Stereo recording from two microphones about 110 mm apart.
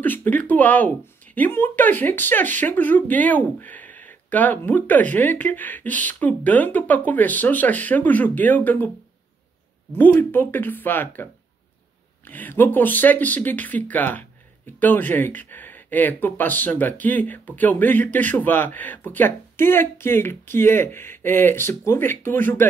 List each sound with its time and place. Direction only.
0.0 s speech: 15° left (ahead or behind)
9.9 s speech: 15° left (ahead or behind)
12.3 s speech: 15° left (ahead or behind)